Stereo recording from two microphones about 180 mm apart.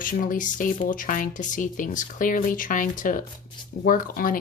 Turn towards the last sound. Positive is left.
turn(degrees=50)  # may be behind; listen again after turning